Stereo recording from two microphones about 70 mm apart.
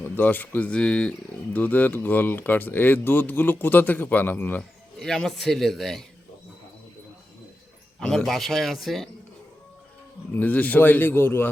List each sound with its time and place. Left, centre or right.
0.0 s speech: left
4.9 s speech: centre
7.9 s speech: centre
10.3 s speech: left